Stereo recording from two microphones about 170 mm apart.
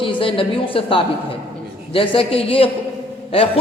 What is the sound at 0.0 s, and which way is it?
A woman's voice, 30° left (ahead or behind).